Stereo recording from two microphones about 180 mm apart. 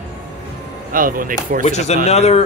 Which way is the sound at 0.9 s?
50° right (ahead or behind).